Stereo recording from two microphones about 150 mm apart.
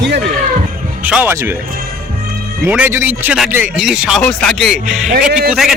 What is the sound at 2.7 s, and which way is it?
Speech, 10° right (ahead or behind).